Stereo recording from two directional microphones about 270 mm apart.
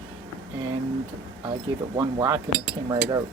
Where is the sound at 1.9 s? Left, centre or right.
Centre.